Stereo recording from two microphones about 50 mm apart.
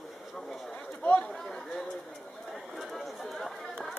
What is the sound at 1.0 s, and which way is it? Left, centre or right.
Chatter, left.